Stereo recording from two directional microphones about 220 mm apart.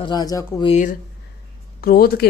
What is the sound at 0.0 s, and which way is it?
Speech, 15° left (ahead or behind).